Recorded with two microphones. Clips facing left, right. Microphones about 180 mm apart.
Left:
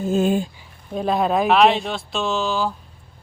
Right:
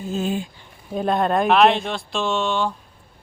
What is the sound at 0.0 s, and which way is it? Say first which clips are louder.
Speech: left 5 dB; 50° left (ahead or behind).